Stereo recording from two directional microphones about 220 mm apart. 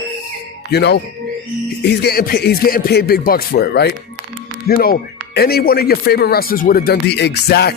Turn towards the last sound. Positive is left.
turn(degrees=50)  # may be behind; listen again after turning